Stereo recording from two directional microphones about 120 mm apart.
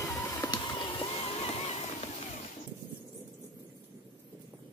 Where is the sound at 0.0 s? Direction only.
20° left (ahead or behind).